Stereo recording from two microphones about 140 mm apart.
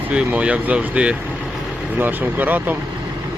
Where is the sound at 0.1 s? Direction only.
10° right (ahead or behind).